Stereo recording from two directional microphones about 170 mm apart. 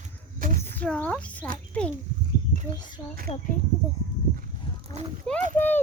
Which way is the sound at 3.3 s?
35° left (ahead or behind).